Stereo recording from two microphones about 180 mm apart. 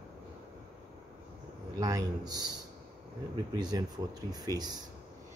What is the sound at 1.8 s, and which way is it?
Speech, 20° right (ahead or behind).